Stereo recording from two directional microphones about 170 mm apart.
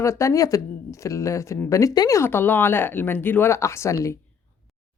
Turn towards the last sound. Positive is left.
turn(degrees=15)  # may be behind; listen again after turning